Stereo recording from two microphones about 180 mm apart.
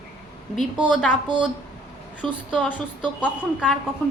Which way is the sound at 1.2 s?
25° right (ahead or behind).